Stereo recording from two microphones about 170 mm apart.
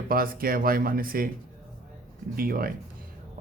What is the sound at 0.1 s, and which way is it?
Speech, 60° right (ahead or behind).